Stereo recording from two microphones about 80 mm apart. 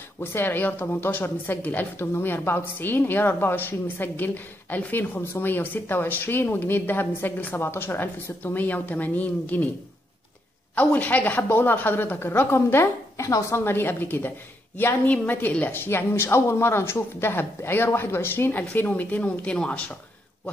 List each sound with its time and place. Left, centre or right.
0.2 s a woman's voice: left
10.7 s a woman's voice: left